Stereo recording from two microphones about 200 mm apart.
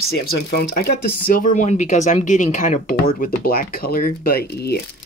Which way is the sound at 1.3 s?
40° left (ahead or behind).